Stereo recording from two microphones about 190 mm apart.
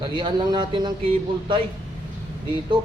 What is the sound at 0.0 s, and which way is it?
Speech, 25° right (ahead or behind).